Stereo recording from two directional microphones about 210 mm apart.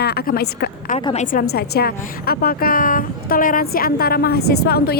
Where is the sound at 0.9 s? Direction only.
30° left (ahead or behind).